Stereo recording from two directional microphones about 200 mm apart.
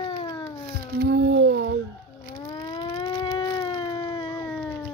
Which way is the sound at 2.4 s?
20° left (ahead or behind).